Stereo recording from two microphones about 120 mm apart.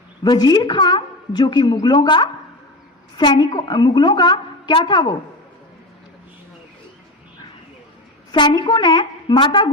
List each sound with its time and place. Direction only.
0.2 s a woman's voice: 35° left (ahead or behind)
8.3 s a woman's voice: 40° left (ahead or behind)